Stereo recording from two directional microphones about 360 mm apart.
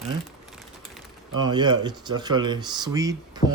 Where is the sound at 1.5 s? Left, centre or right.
Centre.